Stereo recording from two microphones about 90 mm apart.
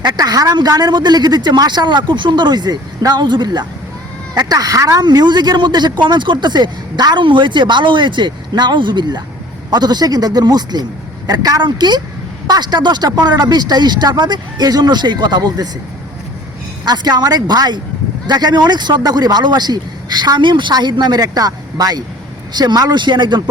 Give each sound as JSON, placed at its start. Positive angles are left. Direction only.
{"t": 0.0, "sound": "speech", "side_deg": -45}
{"t": 4.4, "sound": "speech", "side_deg": -45}
{"t": 11.6, "sound": "speech", "side_deg": -55}
{"t": 16.8, "sound": "speech", "side_deg": -50}